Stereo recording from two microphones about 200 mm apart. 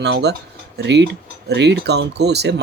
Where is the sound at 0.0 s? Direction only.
55° right (ahead or behind).